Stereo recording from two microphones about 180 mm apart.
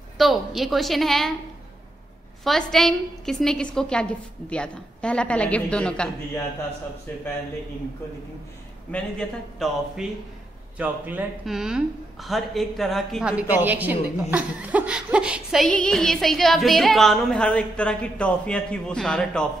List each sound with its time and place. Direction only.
0.2 s speech: centre (ahead or behind)
2.4 s speech: centre (ahead or behind)
9.6 s speech: centre (ahead or behind)
10.8 s speech: 10° right (ahead or behind)